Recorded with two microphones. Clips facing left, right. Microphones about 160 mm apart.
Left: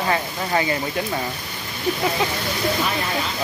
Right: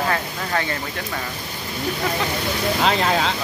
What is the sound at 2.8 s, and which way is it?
Speech, 90° right.